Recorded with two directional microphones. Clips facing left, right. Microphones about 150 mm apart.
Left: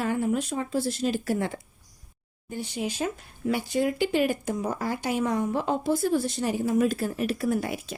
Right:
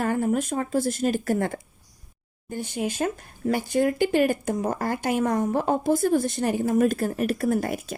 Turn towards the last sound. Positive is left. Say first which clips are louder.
# right 3 dB
turn(degrees=-50)  # may be behind; listen again after turning